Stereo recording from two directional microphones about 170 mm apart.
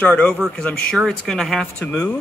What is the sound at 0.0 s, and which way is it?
A man's voice, 10° left (ahead or behind).